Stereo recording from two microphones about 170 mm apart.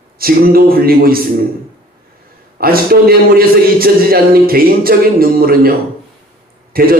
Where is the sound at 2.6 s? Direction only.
60° right (ahead or behind).